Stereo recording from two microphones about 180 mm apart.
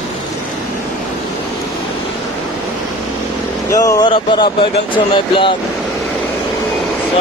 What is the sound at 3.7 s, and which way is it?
Speech, 20° left (ahead or behind).